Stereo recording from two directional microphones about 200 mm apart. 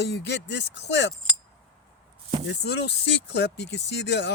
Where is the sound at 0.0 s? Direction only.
60° left (ahead or behind).